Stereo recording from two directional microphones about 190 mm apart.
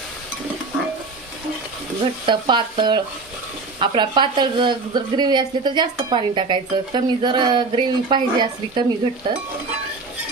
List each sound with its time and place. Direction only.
2.2 s a woman's voice: 25° right (ahead or behind)